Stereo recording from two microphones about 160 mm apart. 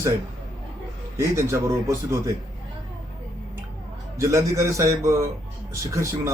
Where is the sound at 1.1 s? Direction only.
15° right (ahead or behind).